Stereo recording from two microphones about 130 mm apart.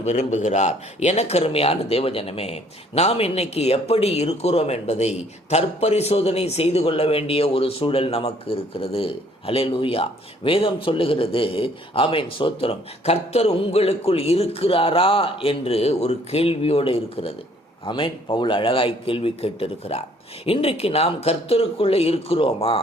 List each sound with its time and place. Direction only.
0.0 s a man's voice: 60° left (ahead or behind); by 22.8 s 45° left (ahead or behind)